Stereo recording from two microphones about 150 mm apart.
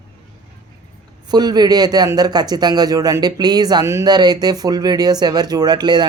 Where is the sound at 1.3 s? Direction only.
25° right (ahead or behind).